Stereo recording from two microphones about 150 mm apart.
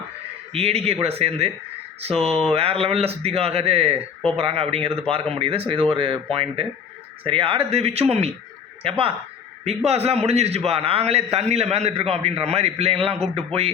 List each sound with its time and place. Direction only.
0.5 s a man's voice: 40° right (ahead or behind)
2.5 s a man's voice: 40° right (ahead or behind)